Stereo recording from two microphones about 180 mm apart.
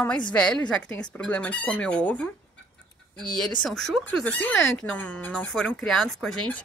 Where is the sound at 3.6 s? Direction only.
Centre (ahead or behind).